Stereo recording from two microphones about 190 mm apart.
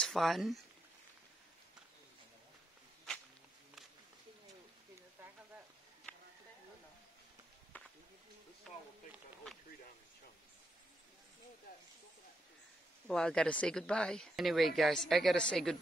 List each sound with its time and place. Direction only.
0.0 s speech: centre (ahead or behind)
7.7 s a sound: 10° left (ahead or behind)
13.0 s speech: 5° left (ahead or behind)